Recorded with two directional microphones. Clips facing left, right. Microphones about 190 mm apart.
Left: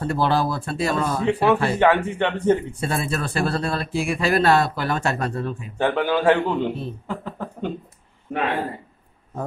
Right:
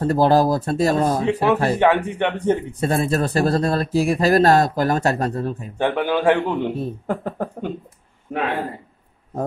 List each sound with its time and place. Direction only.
0.0 s speech: 40° right (ahead or behind)
1.2 s a man's voice: 20° right (ahead or behind)
2.8 s speech: 40° right (ahead or behind)
5.8 s a man's voice: 15° right (ahead or behind)
6.8 s speech: 50° right (ahead or behind)